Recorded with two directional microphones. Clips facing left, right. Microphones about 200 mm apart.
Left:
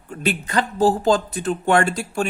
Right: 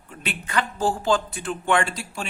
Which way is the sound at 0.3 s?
35° left (ahead or behind).